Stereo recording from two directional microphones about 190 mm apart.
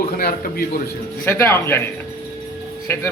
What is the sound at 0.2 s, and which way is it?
Speech, 55° left (ahead or behind).